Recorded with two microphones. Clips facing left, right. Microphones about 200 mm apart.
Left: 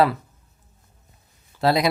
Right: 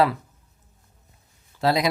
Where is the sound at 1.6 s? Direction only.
60° left (ahead or behind).